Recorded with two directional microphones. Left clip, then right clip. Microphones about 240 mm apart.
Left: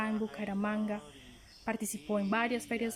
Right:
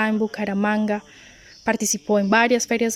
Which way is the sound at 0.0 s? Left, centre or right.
Right.